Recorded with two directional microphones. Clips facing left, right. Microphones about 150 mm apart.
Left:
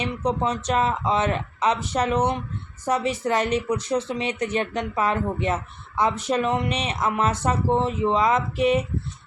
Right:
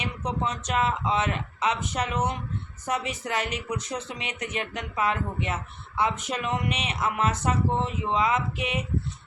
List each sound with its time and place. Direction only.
0.0 s speech: 35° left (ahead or behind)